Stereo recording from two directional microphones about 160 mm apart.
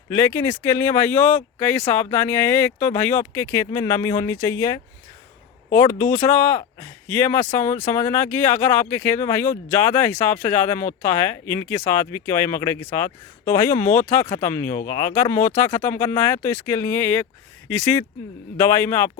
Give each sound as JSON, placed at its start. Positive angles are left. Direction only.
{"t": 0.1, "sound": "speech", "side_deg": 15}